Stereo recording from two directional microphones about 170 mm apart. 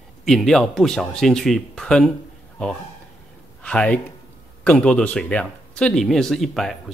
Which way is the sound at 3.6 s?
5° left (ahead or behind).